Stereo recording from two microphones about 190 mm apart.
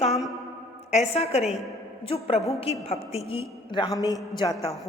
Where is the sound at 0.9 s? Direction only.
35° left (ahead or behind).